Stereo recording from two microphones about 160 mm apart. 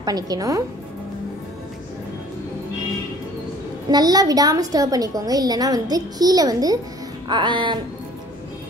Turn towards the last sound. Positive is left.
turn(degrees=-30)  # may be behind; listen again after turning